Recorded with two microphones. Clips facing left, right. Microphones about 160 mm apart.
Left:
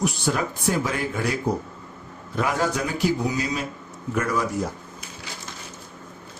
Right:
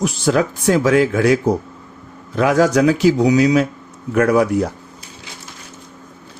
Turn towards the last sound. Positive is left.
turn(degrees=-70)  # may be behind; listen again after turning